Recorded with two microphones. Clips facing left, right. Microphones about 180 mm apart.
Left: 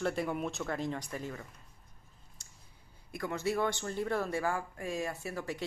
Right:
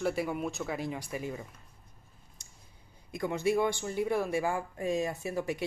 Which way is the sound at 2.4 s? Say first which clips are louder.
Right 2 dB; 15° right (ahead or behind).